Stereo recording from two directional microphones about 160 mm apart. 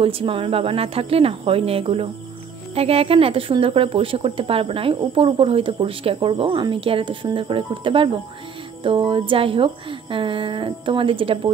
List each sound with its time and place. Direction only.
0.0 s speech: 35° right (ahead or behind)